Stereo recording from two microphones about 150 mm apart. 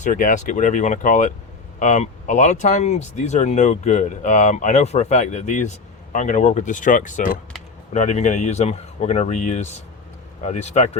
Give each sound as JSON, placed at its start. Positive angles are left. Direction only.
{"t": 0.0, "sound": "speech", "side_deg": 60}